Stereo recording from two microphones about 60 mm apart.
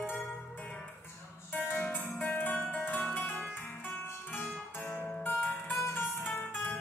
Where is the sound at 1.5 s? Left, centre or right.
Left.